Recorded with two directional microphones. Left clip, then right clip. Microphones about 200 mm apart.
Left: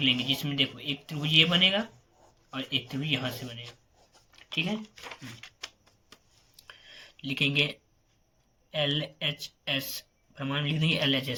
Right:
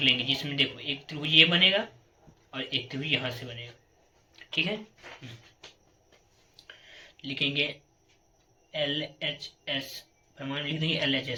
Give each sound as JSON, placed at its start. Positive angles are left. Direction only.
{"t": 0.0, "sound": "speech", "side_deg": 35}
{"t": 6.6, "sound": "clicking", "side_deg": 40}
{"t": 8.7, "sound": "speech", "side_deg": 45}